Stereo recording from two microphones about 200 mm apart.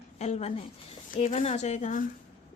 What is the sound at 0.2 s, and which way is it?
A woman's voice, 35° left (ahead or behind).